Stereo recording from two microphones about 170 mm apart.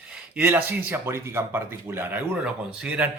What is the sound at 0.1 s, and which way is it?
Speech, 10° right (ahead or behind).